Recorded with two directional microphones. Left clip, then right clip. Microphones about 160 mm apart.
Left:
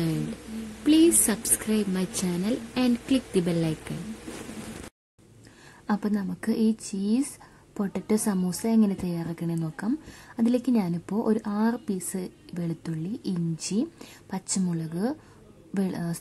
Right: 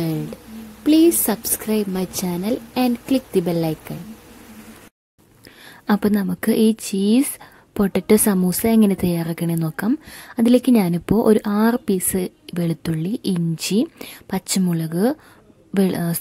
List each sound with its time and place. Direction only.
0.8 s a woman's voice: 45° right (ahead or behind)
5.9 s a woman's voice: 45° right (ahead or behind)